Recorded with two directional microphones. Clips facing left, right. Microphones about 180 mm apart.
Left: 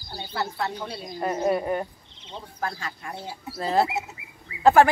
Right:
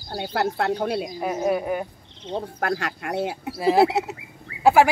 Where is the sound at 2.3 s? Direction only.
70° right (ahead or behind).